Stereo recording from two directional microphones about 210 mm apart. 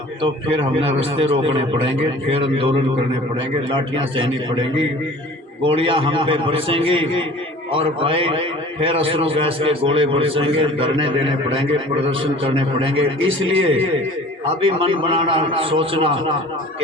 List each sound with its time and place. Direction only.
0.2 s a man's voice: 25° right (ahead or behind)